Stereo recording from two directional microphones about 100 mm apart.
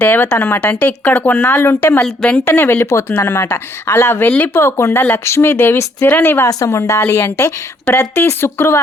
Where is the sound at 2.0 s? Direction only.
10° left (ahead or behind).